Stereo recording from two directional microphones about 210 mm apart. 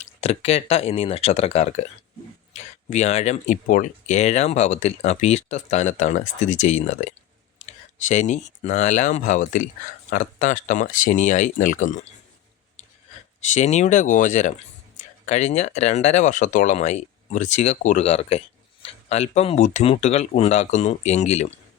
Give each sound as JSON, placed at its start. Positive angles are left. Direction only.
{"t": 0.0, "sound": "speech", "side_deg": 30}
{"t": 13.5, "sound": "speech", "side_deg": 35}